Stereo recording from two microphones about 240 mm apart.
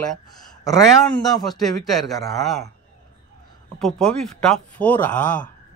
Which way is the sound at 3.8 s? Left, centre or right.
Centre.